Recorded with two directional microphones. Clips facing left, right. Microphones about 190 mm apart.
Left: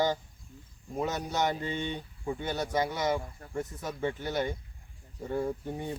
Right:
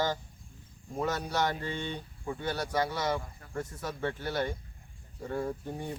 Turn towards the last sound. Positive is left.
turn(degrees=10)  # may be behind; listen again after turning